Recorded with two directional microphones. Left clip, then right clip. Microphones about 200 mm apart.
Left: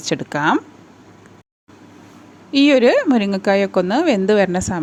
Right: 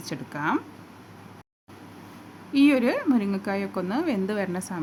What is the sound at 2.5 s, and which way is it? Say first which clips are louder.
Speech: left 9 dB; 35° left (ahead or behind).